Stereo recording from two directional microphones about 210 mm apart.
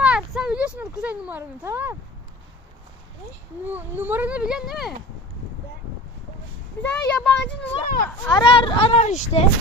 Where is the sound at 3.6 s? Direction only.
10° right (ahead or behind).